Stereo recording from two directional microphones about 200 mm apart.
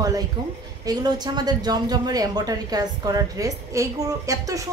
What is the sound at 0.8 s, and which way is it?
A woman's voice, 20° right (ahead or behind).